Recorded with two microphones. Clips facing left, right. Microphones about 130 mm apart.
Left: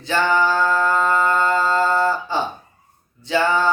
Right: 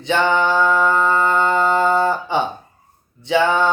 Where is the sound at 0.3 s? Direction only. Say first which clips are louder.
Right 1 dB; 20° right (ahead or behind).